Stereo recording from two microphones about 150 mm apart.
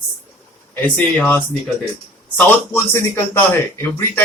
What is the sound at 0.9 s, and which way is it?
Speech, 10° left (ahead or behind).